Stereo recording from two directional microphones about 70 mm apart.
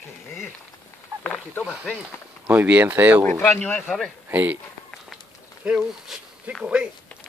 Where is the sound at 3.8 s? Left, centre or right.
Centre.